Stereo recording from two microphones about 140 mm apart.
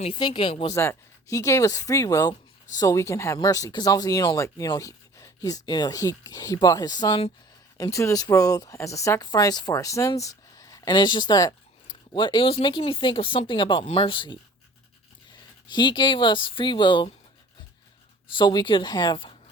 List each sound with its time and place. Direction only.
0.1 s speech: 35° left (ahead or behind)
0.7 s speech: 20° left (ahead or behind); by 14.3 s 35° left (ahead or behind)
15.7 s speech: 35° left (ahead or behind)
18.3 s speech: 35° left (ahead or behind)